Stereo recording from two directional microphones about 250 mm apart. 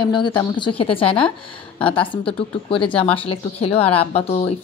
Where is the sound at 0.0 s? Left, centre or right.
Centre.